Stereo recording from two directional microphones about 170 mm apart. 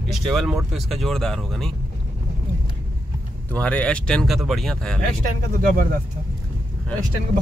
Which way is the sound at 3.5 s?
5° left (ahead or behind).